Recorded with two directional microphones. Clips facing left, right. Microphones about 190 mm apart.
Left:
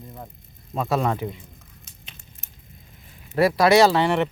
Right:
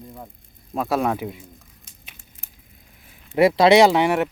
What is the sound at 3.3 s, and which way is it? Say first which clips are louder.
Speech: right 3 dB; 20° right (ahead or behind).